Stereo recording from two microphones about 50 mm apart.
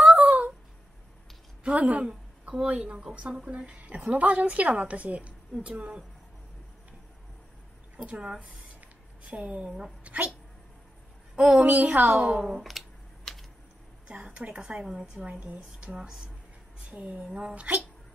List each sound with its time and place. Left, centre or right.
0.0 s a sound: right
1.6 s a woman's voice: right
2.0 s a woman's voice: centre
8.0 s a woman's voice: centre
11.6 s a woman's voice: right
12.2 s speech: centre
12.6 s a sound: centre
14.2 s a woman's voice: right
16.8 s a woman's voice: right